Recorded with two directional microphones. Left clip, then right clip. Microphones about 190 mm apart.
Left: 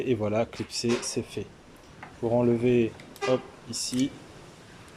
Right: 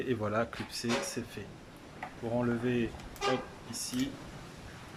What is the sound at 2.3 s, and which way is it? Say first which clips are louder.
Speech: left 9 dB; 20° left (ahead or behind).